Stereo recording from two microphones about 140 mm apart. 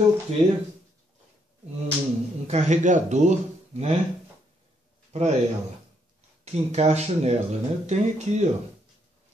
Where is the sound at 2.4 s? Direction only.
55° right (ahead or behind).